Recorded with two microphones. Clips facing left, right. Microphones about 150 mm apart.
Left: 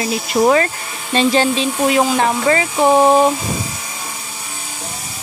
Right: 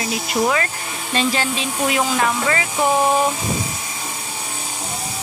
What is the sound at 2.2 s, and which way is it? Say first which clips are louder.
Speech: left 5 dB; 30° left (ahead or behind).